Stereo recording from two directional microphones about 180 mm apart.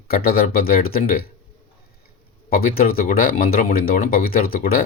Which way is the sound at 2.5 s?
55° left (ahead or behind).